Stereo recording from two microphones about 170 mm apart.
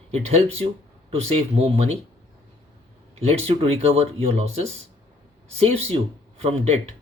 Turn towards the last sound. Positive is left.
turn(degrees=-40)  # may be behind; listen again after turning